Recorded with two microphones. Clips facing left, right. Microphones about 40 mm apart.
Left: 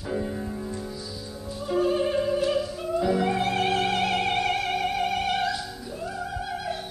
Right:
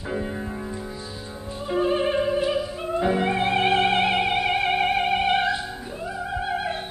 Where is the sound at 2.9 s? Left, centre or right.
Right.